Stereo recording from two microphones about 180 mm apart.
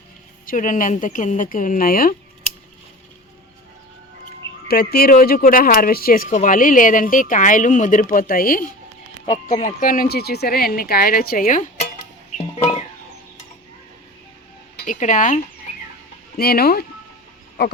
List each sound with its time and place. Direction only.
0.4 s speech: 45° left (ahead or behind)
4.7 s speech: 60° left (ahead or behind)
12.4 s guitar: 30° left (ahead or behind)
14.8 s speech: 45° left (ahead or behind)
16.4 s speech: 60° left (ahead or behind)